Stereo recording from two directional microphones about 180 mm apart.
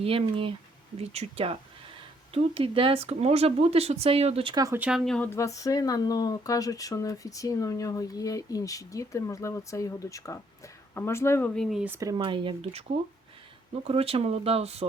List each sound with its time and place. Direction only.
0.0 s speech: 30° right (ahead or behind)
4.5 s speech: 20° right (ahead or behind)
4.8 s speech: 5° right (ahead or behind)
11.9 s speech: 25° right (ahead or behind)
13.8 s speech: 30° right (ahead or behind)